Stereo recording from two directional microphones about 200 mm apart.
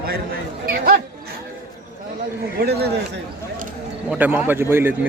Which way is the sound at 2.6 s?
55° right (ahead or behind).